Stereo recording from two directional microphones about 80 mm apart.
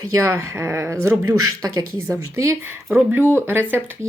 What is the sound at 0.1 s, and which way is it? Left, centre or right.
Speech, right.